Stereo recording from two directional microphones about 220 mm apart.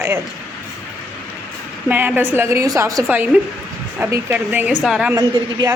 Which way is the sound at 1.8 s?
10° right (ahead or behind).